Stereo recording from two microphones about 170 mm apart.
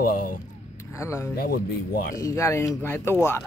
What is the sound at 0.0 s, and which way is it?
Speech, 55° left (ahead or behind).